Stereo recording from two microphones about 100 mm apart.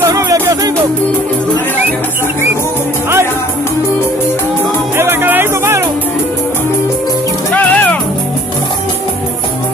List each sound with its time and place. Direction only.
0.0 s music: 35° right (ahead or behind)
4.9 s music: 20° right (ahead or behind)
7.5 s music: 15° left (ahead or behind)